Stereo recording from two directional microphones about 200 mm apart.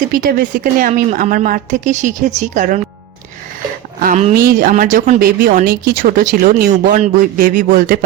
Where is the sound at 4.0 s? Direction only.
40° right (ahead or behind).